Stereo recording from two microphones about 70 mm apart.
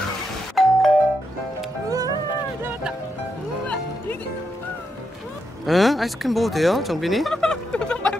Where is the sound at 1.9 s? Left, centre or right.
Right.